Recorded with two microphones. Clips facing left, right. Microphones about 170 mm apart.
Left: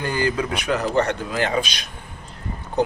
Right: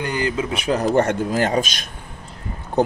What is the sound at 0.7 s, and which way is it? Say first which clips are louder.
Speech: right 4 dB; 45° right (ahead or behind).